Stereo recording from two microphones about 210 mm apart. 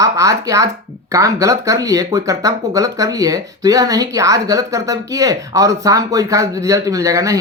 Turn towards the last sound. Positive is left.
turn(degrees=-15)  # may be behind; listen again after turning